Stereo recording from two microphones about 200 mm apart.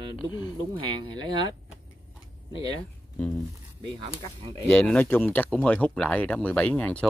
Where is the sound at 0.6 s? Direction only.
20° right (ahead or behind).